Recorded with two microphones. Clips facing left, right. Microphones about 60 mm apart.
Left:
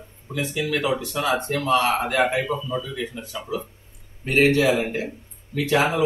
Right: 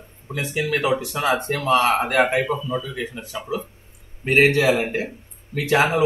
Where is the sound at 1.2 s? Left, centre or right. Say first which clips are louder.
Left 1 dB; right.